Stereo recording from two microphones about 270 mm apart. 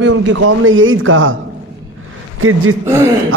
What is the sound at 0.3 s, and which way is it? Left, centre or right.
A man's voice, right.